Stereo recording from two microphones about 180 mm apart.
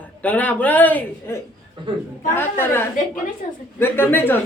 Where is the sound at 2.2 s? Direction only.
10° left (ahead or behind).